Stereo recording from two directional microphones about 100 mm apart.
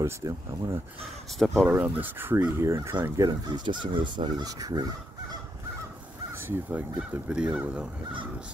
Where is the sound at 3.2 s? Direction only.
45° right (ahead or behind).